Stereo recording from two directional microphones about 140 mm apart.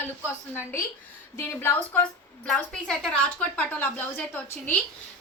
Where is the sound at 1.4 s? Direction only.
15° left (ahead or behind).